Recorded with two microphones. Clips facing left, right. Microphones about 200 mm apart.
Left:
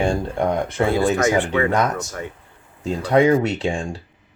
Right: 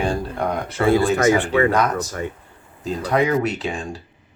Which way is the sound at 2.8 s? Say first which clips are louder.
Left 4 dB; 25° left (ahead or behind).